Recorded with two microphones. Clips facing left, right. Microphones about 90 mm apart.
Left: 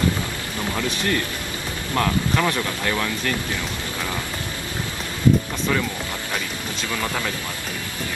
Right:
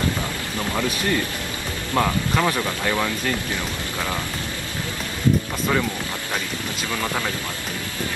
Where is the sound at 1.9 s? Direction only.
10° right (ahead or behind).